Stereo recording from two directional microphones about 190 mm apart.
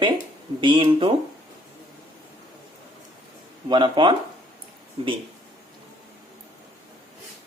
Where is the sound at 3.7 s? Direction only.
25° right (ahead or behind).